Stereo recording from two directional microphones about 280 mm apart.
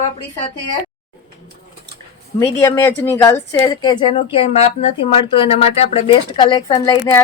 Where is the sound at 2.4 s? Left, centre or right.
Centre.